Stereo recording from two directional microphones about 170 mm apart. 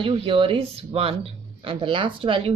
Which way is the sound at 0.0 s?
30° right (ahead or behind).